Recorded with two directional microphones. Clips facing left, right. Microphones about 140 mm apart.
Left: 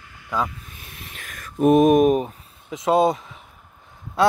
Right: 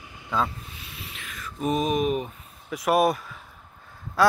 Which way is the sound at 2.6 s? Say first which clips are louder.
Left 3 dB; 20° left (ahead or behind).